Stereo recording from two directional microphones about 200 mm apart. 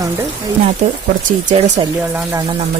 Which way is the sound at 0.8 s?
35° right (ahead or behind).